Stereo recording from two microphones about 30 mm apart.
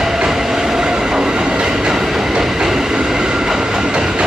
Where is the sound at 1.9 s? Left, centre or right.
Centre.